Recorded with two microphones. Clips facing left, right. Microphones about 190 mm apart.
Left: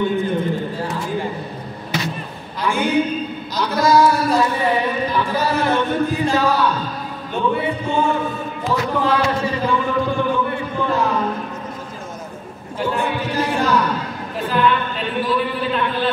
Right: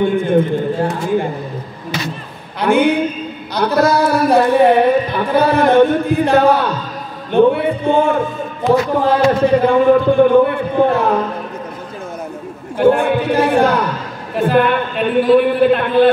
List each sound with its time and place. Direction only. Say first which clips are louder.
0.0 s a man's voice: right 6 dB; 55° right (ahead or behind)
2.6 s a man's voice: right 5 dB; 60° right (ahead or behind)
7.3 s a sound: right 9 dB; 60° right (ahead or behind)
9.0 s a man's voice: right 6 dB; 55° right (ahead or behind)
12.7 s a sound: right 10 dB; 55° right (ahead or behind)
14.3 s a man's voice: right 5 dB; 55° right (ahead or behind)